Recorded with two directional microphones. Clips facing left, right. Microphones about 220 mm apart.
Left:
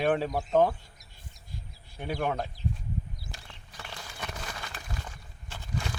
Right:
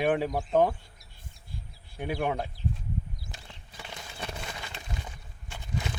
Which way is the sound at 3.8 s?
20° right (ahead or behind).